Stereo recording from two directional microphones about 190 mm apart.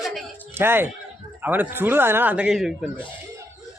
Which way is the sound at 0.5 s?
10° right (ahead or behind).